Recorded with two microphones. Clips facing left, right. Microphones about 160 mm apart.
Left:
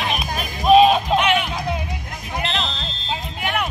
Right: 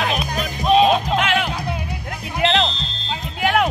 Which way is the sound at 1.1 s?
90° right.